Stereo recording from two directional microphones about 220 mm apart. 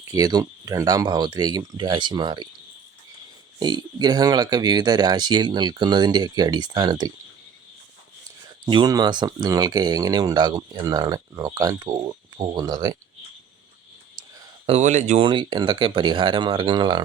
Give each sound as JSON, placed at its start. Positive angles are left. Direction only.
{"t": 0.1, "sound": "speech", "side_deg": -15}
{"t": 3.6, "sound": "speech", "side_deg": -20}
{"t": 8.6, "sound": "speech", "side_deg": -20}
{"t": 14.7, "sound": "speech", "side_deg": -30}
{"t": 15.2, "sound": "speech", "side_deg": -20}